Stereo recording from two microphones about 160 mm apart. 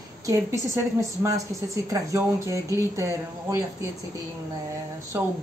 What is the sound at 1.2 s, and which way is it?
Speech, 20° right (ahead or behind).